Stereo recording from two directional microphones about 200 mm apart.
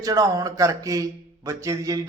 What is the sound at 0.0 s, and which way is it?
A man's voice, 20° right (ahead or behind).